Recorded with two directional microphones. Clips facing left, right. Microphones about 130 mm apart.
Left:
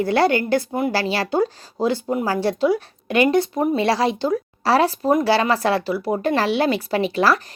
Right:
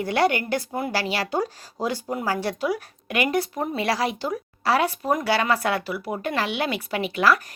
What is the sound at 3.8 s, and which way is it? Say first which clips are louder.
Speech: left 2 dB; 25° left (ahead or behind).